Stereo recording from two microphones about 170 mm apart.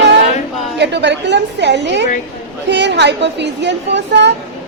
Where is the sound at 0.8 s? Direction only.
90° right.